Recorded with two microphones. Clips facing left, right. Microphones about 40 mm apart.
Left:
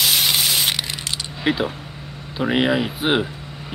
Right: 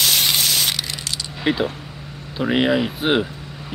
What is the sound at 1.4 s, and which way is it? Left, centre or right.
Speech, centre.